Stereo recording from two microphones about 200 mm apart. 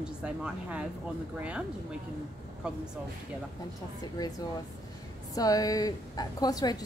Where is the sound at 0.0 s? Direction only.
5° right (ahead or behind).